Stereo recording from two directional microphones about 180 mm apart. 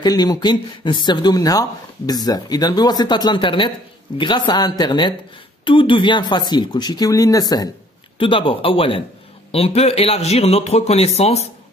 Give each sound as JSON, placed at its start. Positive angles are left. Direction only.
{"t": 0.0, "sound": "speech", "side_deg": 20}